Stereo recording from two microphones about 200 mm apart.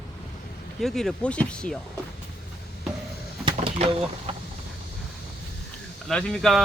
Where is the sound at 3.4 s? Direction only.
25° right (ahead or behind).